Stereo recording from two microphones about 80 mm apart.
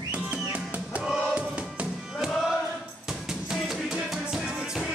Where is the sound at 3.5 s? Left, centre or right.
Centre.